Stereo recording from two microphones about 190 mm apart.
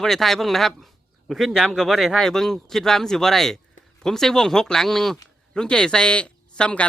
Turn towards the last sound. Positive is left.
turn(degrees=5)  # may be behind; listen again after turning